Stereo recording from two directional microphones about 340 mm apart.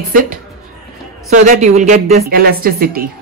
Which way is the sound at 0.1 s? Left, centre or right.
Right.